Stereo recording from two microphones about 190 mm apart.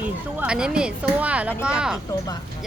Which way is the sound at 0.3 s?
5° right (ahead or behind).